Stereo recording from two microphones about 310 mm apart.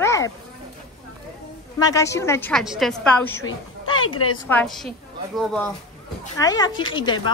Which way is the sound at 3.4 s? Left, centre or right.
Left.